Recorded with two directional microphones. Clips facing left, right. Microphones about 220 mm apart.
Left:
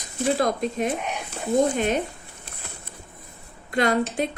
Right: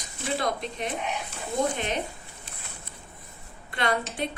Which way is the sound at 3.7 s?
45° left (ahead or behind).